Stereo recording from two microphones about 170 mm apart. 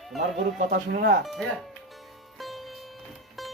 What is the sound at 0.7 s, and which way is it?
Speech, 65° right (ahead or behind).